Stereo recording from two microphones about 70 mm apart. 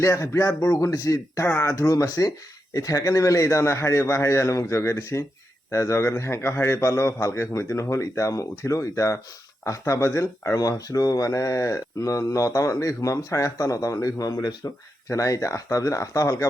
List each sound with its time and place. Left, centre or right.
0.0 s speech: left
1.5 s speech: left
1.9 s speech: left
10.6 s speech: left